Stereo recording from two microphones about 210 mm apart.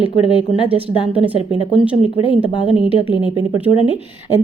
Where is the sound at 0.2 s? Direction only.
25° left (ahead or behind).